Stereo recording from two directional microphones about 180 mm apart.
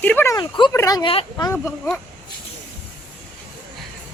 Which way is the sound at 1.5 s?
10° left (ahead or behind).